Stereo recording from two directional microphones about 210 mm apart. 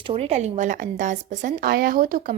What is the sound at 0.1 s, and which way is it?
A woman's voice, 30° right (ahead or behind).